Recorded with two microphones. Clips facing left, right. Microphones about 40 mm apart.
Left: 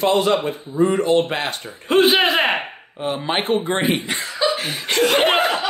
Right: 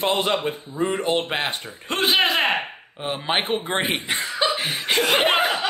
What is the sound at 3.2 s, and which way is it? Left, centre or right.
Speech, centre.